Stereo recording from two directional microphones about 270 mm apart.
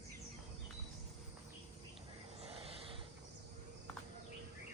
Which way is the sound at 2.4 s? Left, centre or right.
Right.